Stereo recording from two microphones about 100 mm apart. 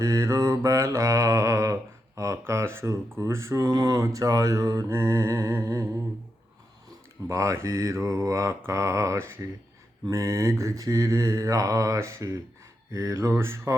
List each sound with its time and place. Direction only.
0.0 s mantra: 35° right (ahead or behind)
7.3 s mantra: 30° right (ahead or behind)